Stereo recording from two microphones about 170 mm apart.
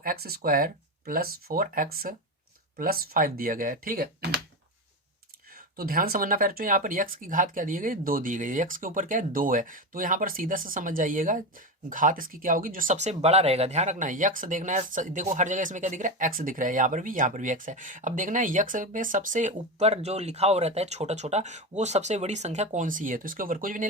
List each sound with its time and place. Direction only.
0.0 s speech: 60° right (ahead or behind)
5.7 s speech: 60° right (ahead or behind)
19.5 s speech: 40° right (ahead or behind)